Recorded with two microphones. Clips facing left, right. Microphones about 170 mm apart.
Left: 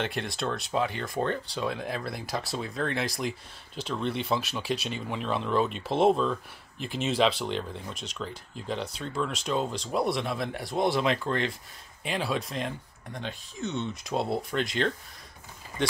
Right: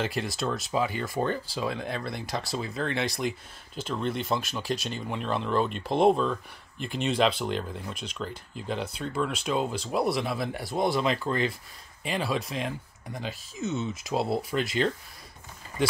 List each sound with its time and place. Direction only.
0.0 s speech: centre (ahead or behind)